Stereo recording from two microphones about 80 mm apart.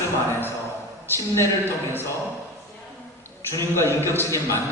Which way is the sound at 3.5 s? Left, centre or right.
Left.